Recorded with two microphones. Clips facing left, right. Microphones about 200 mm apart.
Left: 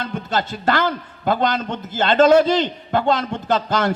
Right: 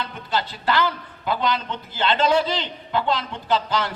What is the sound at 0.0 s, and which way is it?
A man's voice, 45° left (ahead or behind).